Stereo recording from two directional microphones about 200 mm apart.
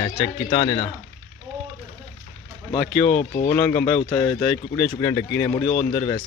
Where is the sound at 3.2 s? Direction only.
40° left (ahead or behind).